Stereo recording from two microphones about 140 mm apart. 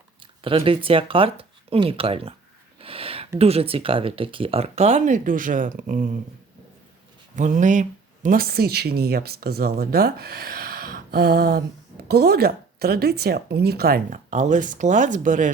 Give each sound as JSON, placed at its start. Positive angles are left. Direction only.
{"t": 0.2, "sound": "speech", "side_deg": -40}
{"t": 7.3, "sound": "speech", "side_deg": -65}